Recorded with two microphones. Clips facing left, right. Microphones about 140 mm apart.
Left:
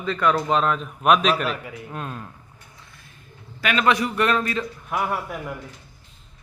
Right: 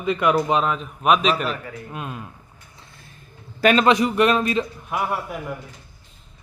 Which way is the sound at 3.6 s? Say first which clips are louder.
Right 7 dB; 35° right (ahead or behind).